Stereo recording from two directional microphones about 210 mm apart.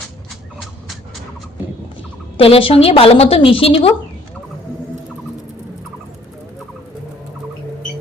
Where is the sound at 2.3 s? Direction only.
25° left (ahead or behind).